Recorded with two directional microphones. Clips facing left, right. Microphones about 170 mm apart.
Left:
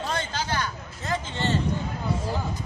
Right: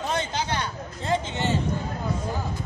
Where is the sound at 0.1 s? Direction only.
25° right (ahead or behind).